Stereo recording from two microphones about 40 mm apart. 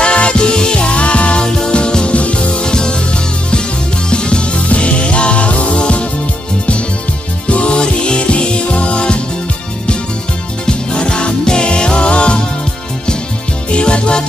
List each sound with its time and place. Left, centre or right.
0.0 s music: left
1.4 s music: centre
4.1 s music: left
7.4 s music: left
10.7 s music: left
13.7 s music: left